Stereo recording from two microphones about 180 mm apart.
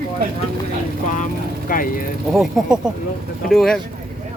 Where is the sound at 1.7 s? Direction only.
50° left (ahead or behind).